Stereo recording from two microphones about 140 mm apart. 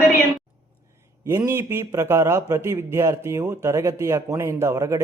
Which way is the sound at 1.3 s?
20° right (ahead or behind).